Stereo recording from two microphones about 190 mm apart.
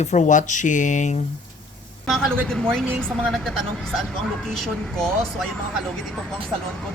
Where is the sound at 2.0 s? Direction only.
Centre (ahead or behind).